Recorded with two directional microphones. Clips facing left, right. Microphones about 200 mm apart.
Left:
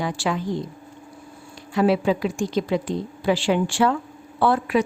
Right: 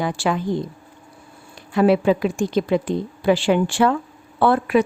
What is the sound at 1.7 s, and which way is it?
A woman's voice, 55° right (ahead or behind).